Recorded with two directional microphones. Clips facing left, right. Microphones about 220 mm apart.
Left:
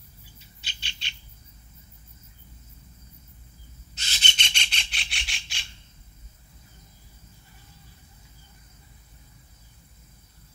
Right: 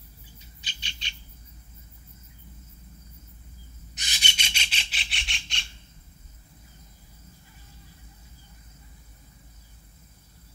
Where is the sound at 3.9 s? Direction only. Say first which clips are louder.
Left 1 dB; 15° right (ahead or behind); by 5.6 s 5° left (ahead or behind).